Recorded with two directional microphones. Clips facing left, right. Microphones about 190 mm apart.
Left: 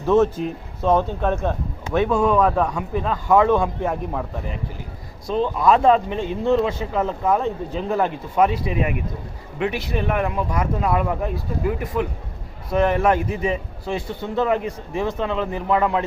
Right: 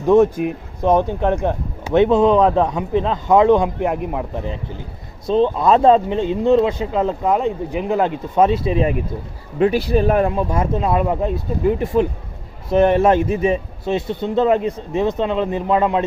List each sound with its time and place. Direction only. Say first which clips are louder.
0.0 s a man's voice: right 4 dB; 15° right (ahead or behind)